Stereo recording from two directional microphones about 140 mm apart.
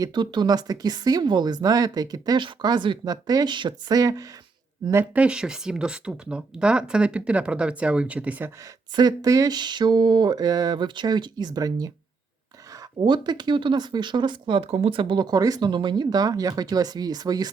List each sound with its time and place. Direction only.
0.0 s speech: 30° right (ahead or behind)
4.9 s speech: 15° right (ahead or behind)
9.0 s speech: 25° right (ahead or behind)
13.0 s speech: 35° right (ahead or behind)